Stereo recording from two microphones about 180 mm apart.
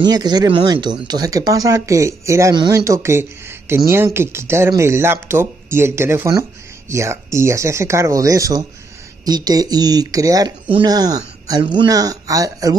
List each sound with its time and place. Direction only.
0.0 s speech: 20° right (ahead or behind)